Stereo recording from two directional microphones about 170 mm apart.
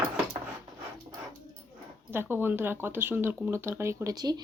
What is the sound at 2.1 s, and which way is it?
Speech, 10° right (ahead or behind).